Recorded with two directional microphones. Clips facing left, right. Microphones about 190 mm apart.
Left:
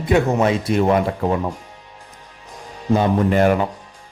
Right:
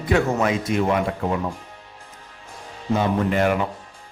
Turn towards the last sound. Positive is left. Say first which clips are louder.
# left 4 dB
turn(degrees=35)  # may be behind; listen again after turning